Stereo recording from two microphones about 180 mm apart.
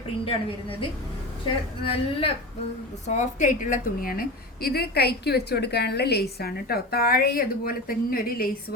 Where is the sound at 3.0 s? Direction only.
40° left (ahead or behind).